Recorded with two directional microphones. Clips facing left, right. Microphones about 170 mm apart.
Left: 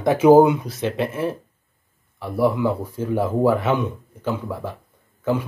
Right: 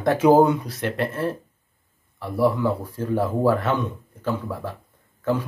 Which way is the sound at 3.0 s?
5° left (ahead or behind).